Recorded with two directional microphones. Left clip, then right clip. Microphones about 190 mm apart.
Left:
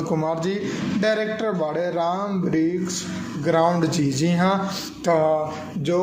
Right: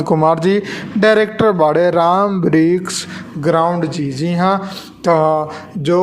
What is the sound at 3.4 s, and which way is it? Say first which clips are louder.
Speech: right 5 dB; 25° right (ahead or behind).